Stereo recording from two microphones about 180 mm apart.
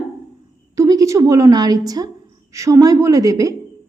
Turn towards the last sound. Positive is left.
turn(degrees=-20)  # may be behind; listen again after turning